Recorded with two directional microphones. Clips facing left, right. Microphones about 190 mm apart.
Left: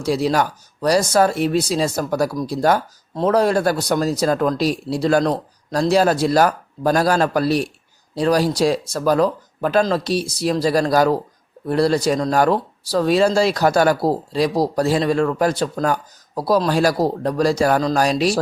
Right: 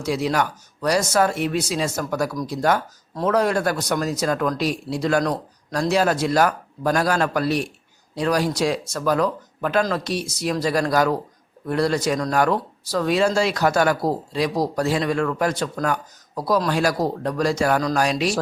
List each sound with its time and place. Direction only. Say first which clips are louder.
0.0 s speech: left 3 dB; 35° left (ahead or behind)